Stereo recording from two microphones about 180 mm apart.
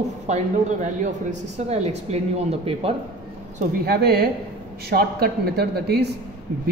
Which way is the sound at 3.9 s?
60° right (ahead or behind).